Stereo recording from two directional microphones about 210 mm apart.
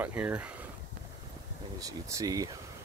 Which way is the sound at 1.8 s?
15° right (ahead or behind).